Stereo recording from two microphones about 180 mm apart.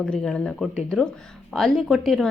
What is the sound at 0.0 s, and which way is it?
A woman's voice, 5° left (ahead or behind).